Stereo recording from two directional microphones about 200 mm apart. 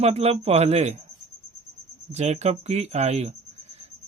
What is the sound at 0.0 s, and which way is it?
Speech, 30° right (ahead or behind).